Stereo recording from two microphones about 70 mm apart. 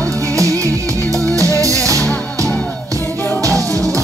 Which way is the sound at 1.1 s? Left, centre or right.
Right.